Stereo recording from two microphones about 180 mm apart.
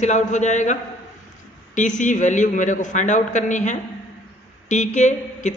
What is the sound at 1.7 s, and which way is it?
A woman's voice, 45° left (ahead or behind).